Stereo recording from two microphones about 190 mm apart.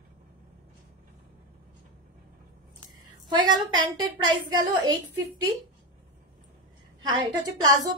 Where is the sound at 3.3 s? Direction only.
25° right (ahead or behind).